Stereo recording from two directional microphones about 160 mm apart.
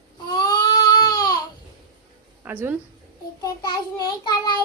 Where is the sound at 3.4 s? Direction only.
25° left (ahead or behind).